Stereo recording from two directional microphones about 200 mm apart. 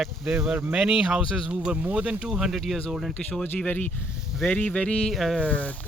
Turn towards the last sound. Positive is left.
turn(degrees=5)  # may be behind; listen again after turning